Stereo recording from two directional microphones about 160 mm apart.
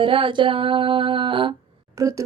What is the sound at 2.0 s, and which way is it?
Speech, 20° right (ahead or behind).